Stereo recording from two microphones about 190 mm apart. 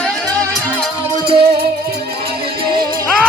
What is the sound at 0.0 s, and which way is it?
Music, 5° left (ahead or behind).